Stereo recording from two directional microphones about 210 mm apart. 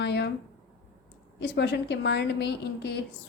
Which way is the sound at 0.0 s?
55° left (ahead or behind).